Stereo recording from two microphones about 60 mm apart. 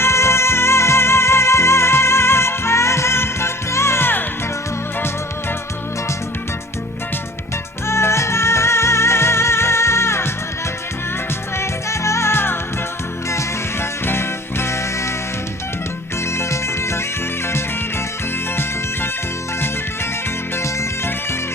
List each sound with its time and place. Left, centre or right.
0.0 s music: left
7.9 s music: left
11.5 s music: left
16.4 s music: left
20.6 s music: left